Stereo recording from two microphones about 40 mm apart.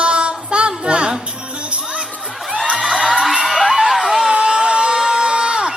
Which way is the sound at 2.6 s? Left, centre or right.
Centre.